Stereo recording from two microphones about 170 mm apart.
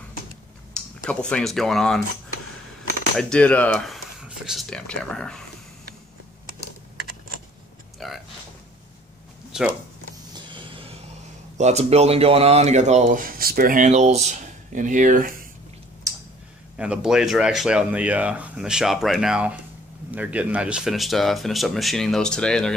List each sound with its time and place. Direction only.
0.7 s speech: 5° left (ahead or behind)
3.2 s speech: 5° left (ahead or behind)
8.0 s a sound: centre (ahead or behind)
9.5 s speech: 5° right (ahead or behind)
10.5 s a sound: 30° right (ahead or behind)
11.5 s speech: 40° right (ahead or behind)
16.1 s tick-tock: 20° right (ahead or behind)
16.7 s speech: 5° right (ahead or behind)